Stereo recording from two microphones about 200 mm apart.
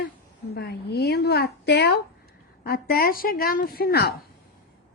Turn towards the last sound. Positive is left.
turn(degrees=55)  # may be behind; listen again after turning